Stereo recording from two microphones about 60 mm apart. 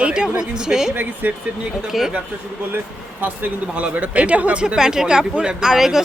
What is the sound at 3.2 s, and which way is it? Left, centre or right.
Speech, right.